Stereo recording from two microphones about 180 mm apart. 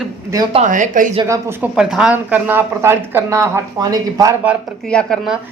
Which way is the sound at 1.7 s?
5° right (ahead or behind).